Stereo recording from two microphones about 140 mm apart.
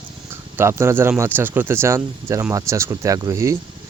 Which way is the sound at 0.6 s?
20° right (ahead or behind).